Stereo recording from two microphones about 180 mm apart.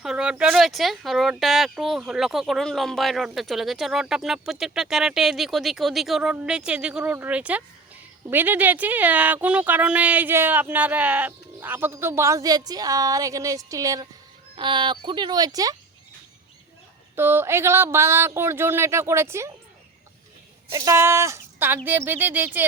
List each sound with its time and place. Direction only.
0.0 s speech: 5° right (ahead or behind); by 15.7 s 20° right (ahead or behind)
17.2 s speech: 10° right (ahead or behind)
20.7 s speech: 20° right (ahead or behind)